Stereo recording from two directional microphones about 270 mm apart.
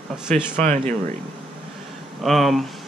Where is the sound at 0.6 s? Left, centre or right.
Right.